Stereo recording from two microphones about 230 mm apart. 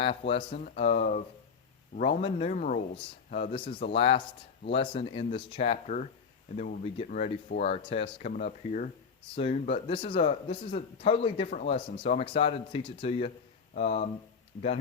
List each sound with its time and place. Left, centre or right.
0.0 s speech: left